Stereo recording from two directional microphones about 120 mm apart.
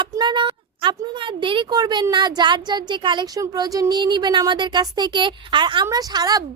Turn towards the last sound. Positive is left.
turn(degrees=-30)  # may be behind; listen again after turning